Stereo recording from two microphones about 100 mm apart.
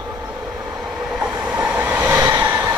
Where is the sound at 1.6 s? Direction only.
20° right (ahead or behind).